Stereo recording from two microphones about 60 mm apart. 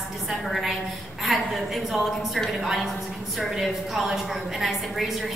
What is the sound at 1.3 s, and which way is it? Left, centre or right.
Speech, centre.